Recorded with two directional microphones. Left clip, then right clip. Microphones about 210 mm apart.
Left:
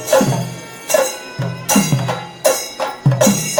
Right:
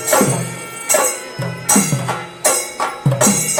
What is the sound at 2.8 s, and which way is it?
Music, 25° left (ahead or behind).